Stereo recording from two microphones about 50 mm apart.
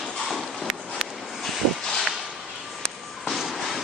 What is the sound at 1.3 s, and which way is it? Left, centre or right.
Vehicle, centre.